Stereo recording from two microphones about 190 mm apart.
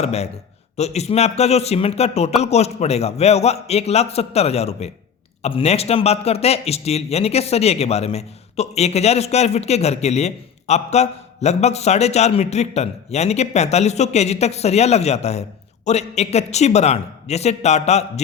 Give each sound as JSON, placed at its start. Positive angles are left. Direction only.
{"t": 0.0, "sound": "a man's voice", "side_deg": 35}